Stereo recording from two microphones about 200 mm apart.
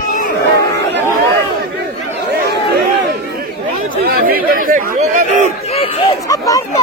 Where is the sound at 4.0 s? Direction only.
45° right (ahead or behind).